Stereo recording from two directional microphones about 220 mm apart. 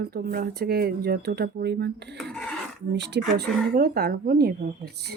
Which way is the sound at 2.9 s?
50° right (ahead or behind).